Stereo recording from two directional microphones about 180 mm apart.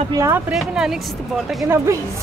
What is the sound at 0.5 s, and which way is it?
Speech, centre (ahead or behind).